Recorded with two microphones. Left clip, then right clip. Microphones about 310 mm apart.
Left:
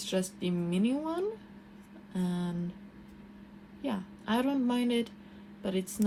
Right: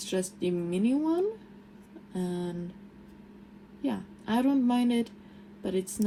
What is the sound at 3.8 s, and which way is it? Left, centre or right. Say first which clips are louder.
Speech: right 2 dB; left.